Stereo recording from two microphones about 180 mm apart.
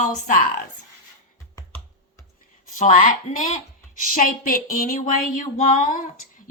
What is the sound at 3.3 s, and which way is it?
A woman's voice, 45° left (ahead or behind).